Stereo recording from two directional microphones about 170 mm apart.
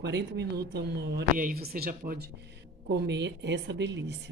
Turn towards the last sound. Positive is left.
turn(degrees=-90)